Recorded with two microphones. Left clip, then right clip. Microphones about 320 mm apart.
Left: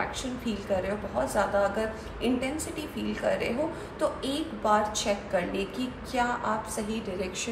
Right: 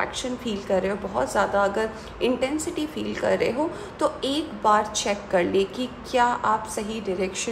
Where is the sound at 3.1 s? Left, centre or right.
Right.